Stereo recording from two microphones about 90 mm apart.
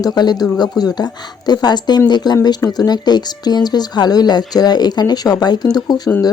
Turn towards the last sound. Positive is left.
turn(degrees=50)  # may be behind; listen again after turning